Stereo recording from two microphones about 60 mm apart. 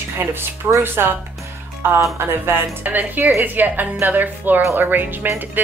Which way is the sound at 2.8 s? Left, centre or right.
Right.